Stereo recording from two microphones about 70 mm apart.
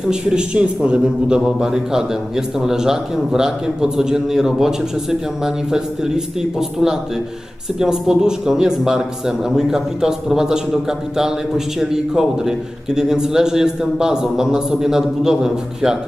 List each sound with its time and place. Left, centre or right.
0.1 s a man's voice: centre
7.8 s a man's voice: centre